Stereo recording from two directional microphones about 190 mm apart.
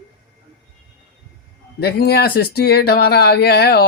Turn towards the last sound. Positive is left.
turn(degrees=55)  # may be behind; listen again after turning